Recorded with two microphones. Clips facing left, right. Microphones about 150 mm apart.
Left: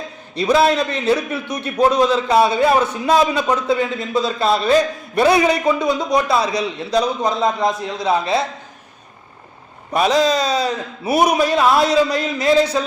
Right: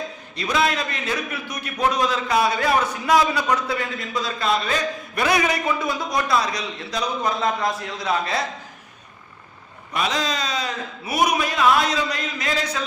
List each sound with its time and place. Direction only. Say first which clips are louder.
0.4 s a man's voice: left 7 dB; 30° left (ahead or behind)
9.9 s a man's voice: left 9 dB; 35° left (ahead or behind)